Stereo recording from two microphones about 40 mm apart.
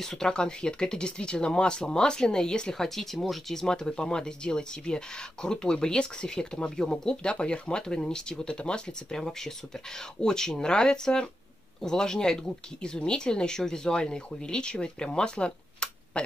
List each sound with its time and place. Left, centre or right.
0.0 s speech: centre
0.3 s speech: left
2.7 s speech: centre
10.2 s speech: centre